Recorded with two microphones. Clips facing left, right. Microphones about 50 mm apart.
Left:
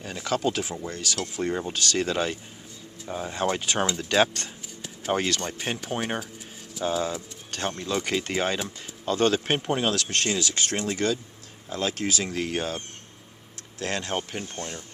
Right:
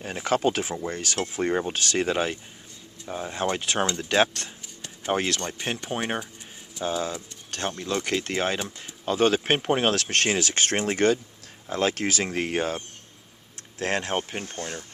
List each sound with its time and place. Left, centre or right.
0.0 s speech: right; by 9.4 s centre
9.4 s speech: right
12.5 s speech: right
14.4 s speech: right